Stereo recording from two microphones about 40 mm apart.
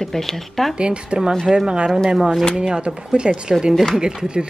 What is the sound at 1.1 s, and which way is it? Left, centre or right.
Speech, right.